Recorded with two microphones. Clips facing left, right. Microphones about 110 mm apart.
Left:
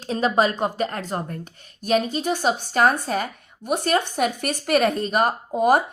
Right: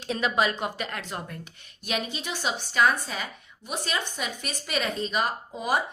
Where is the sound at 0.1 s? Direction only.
35° left (ahead or behind).